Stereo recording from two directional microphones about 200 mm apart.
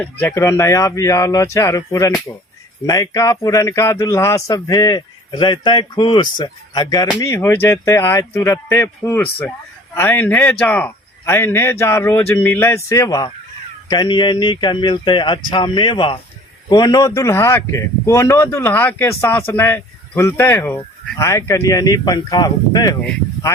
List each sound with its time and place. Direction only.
0.0 s speech: 10° left (ahead or behind)